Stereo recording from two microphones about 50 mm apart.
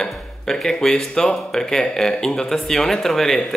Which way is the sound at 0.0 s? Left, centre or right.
Centre.